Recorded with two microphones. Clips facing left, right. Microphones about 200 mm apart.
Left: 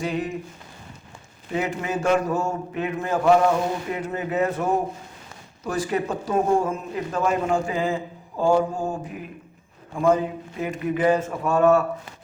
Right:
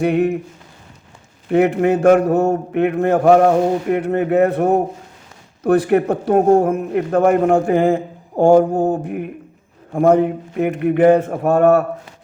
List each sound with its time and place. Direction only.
0.0 s a man's voice: 65° right (ahead or behind)
1.5 s a man's voice: 60° right (ahead or behind)